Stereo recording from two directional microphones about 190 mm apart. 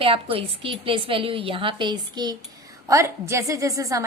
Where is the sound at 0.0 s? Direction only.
30° right (ahead or behind).